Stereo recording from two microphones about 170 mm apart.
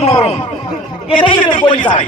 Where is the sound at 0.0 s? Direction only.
40° left (ahead or behind).